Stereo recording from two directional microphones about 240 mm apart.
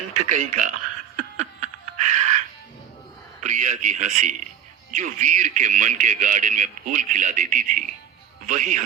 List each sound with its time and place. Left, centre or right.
0.1 s a man's voice: right
1.1 s laughter: right
3.4 s a man's voice: right